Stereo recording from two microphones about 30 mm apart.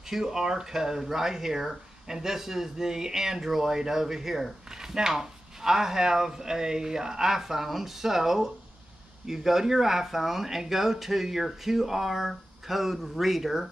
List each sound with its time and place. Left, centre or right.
0.0 s speech: centre